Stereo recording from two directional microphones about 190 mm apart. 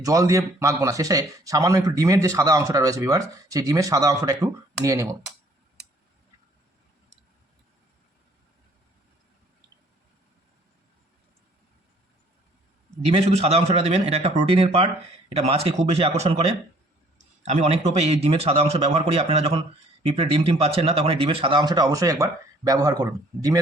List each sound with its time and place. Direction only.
0.0 s speech: 15° right (ahead or behind)
13.1 s a man's voice: 35° right (ahead or behind)